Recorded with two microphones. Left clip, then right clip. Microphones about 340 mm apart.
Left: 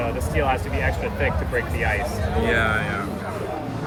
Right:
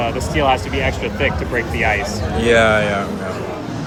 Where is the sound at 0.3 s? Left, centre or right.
Right.